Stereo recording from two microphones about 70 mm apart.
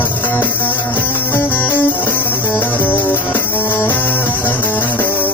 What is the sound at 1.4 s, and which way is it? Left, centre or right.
Music, left.